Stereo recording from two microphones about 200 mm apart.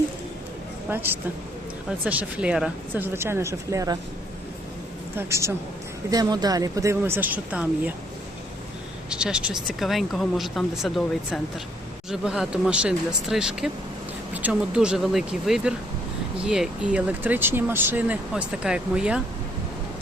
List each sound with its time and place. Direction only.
0.9 s speech: 10° right (ahead or behind)
5.1 s speech: 15° right (ahead or behind)
9.0 s speech: 5° right (ahead or behind)